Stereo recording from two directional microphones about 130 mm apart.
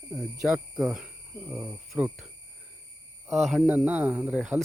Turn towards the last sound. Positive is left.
turn(degrees=-10)  # may be behind; listen again after turning